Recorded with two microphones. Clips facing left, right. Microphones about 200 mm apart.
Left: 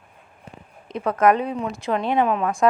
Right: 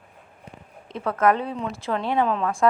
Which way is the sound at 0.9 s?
15° left (ahead or behind).